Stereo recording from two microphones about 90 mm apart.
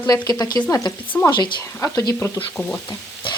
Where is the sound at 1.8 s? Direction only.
40° left (ahead or behind).